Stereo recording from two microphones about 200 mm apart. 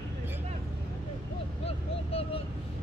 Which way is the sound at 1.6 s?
30° left (ahead or behind).